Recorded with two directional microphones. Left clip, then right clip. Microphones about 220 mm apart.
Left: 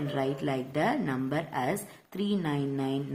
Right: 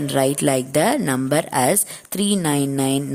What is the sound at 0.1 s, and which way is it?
A woman's voice, 50° right (ahead or behind).